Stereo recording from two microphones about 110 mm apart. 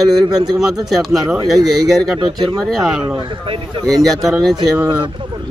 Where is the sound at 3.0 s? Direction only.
50° right (ahead or behind).